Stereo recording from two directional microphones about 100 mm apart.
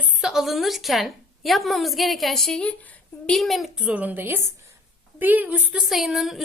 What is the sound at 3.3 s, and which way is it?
Speech, centre (ahead or behind).